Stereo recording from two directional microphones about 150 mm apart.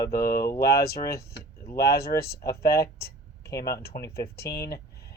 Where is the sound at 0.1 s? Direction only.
90° left.